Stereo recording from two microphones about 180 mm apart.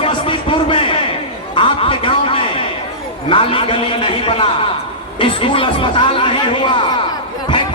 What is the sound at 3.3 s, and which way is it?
Speech, 30° left (ahead or behind).